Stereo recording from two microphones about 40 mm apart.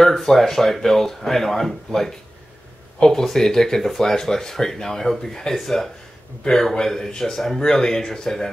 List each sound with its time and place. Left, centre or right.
0.0 s speech: centre